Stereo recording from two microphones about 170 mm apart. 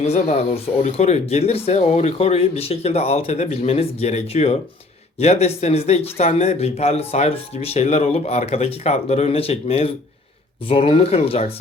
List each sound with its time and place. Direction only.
0.0 s speech: 40° left (ahead or behind)